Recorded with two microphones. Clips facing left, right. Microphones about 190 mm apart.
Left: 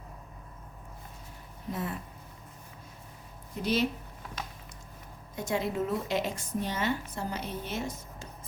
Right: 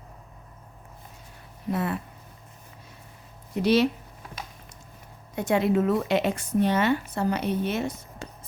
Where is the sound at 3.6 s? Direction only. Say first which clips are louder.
Right 7 dB; 80° right.